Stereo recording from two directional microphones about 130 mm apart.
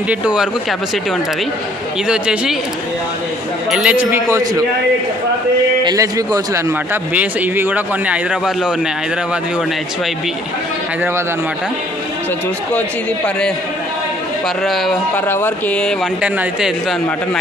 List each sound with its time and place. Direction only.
0.1 s a man's voice: 10° right (ahead or behind)
2.0 s speech: 5° right (ahead or behind)
3.7 s a man's voice: 10° right (ahead or behind)
5.9 s a man's voice: 25° right (ahead or behind)
7.2 s a man's voice: 15° right (ahead or behind)
14.6 s speech: centre (ahead or behind)
15.1 s speech: 15° left (ahead or behind)
16.2 s a man's voice: 5° right (ahead or behind)